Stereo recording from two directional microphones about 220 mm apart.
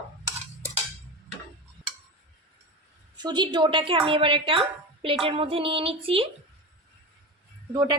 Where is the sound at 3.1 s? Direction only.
20° right (ahead or behind).